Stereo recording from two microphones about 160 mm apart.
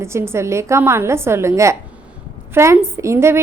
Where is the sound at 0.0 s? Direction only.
15° right (ahead or behind).